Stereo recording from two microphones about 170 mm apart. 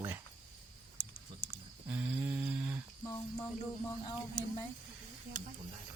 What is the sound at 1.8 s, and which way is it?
Speech, 10° right (ahead or behind).